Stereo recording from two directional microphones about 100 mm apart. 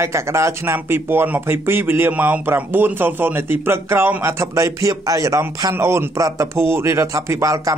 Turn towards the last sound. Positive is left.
turn(degrees=-35)  # may be behind; listen again after turning